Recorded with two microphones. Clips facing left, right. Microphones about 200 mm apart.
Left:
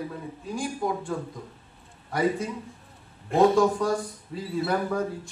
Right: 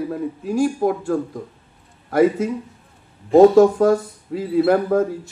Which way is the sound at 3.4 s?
45° right (ahead or behind).